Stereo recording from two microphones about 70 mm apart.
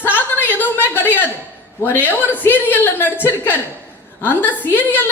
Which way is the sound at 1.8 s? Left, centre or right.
Left.